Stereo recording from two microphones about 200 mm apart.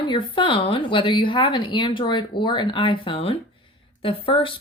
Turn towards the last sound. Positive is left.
turn(degrees=25)  # may be behind; listen again after turning